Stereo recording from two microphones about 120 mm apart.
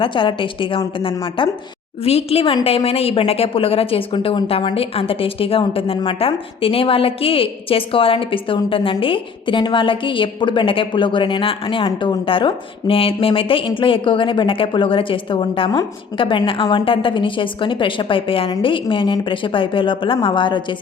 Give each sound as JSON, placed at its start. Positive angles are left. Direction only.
{"t": 0.0, "sound": "a woman's voice", "side_deg": 45}
{"t": 2.0, "sound": "a woman's voice", "side_deg": 55}